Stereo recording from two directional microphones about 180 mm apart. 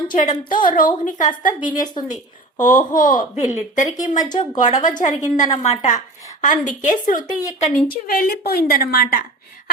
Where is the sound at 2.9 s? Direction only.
45° left (ahead or behind).